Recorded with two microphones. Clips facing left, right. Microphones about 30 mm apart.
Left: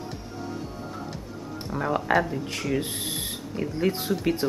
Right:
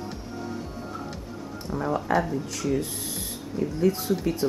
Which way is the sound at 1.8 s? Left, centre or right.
Left.